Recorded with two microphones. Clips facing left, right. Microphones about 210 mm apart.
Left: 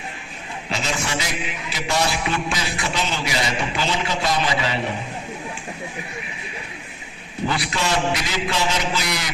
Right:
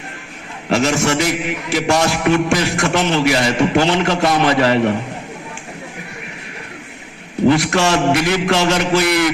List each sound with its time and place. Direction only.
0.7 s a man's voice: 70° right (ahead or behind)
2.0 s a man's voice: 60° right (ahead or behind)
7.7 s a man's voice: 75° right (ahead or behind); by 9.3 s 60° right (ahead or behind)